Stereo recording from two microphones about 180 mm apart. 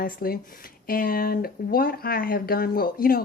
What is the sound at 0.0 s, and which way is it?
Speech, 55° left (ahead or behind).